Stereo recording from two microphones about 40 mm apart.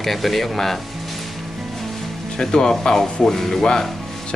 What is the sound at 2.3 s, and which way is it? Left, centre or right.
Speech, centre.